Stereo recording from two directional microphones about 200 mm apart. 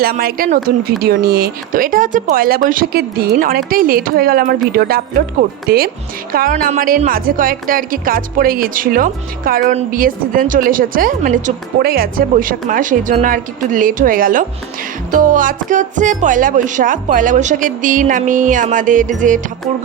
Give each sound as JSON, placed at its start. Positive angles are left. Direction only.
{"t": 0.0, "sound": "a woman's voice", "side_deg": -50}